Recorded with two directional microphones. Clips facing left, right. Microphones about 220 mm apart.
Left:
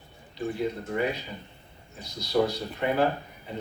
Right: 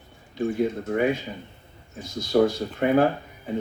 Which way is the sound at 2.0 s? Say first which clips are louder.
Right 5 dB; 50° right (ahead or behind).